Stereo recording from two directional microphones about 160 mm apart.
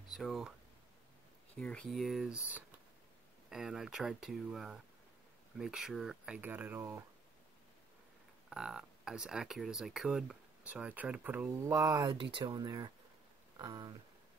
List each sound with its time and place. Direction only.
0.1 s speech: centre (ahead or behind)
1.5 s speech: 5° left (ahead or behind); by 7.1 s 15° right (ahead or behind)
8.5 s speech: 5° right (ahead or behind); by 13.9 s 25° right (ahead or behind)